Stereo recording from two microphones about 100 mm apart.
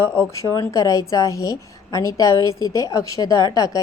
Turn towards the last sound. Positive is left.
turn(degrees=35)  # may be behind; listen again after turning